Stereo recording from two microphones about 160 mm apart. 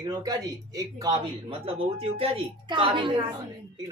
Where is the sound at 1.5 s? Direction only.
35° right (ahead or behind).